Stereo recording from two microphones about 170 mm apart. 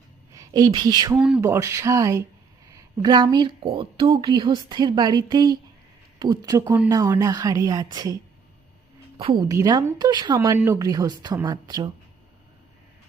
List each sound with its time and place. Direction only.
0.3 s a woman's voice: 25° right (ahead or behind)